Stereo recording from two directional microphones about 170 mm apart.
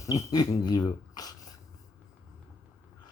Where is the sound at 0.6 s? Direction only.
20° left (ahead or behind).